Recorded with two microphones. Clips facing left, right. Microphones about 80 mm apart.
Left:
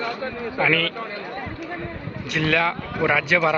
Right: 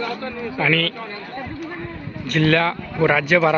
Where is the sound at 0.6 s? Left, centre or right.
Centre.